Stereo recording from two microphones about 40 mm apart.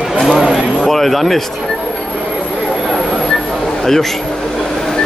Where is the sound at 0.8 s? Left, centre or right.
Centre.